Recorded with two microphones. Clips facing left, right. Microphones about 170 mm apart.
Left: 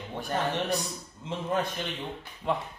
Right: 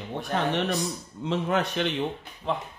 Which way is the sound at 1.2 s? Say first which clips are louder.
Right 4 dB; 75° right (ahead or behind).